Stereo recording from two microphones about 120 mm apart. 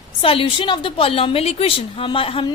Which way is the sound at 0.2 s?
50° left (ahead or behind).